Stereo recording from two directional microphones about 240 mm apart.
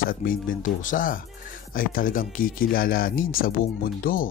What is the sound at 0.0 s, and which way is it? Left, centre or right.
Speech, left.